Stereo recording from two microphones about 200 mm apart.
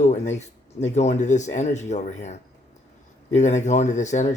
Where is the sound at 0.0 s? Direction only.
35° left (ahead or behind).